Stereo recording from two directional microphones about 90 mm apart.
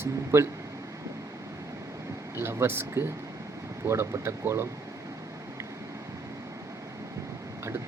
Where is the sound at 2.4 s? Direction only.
25° right (ahead or behind).